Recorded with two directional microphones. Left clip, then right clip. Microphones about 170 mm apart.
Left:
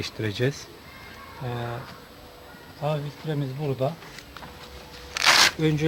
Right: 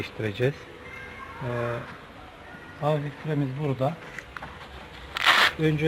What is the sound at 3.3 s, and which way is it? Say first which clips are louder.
Speech: right 1 dB; 55° left (ahead or behind).